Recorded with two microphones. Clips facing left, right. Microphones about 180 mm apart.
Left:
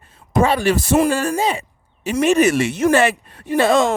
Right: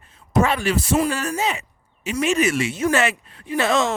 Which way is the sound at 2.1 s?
45° left (ahead or behind).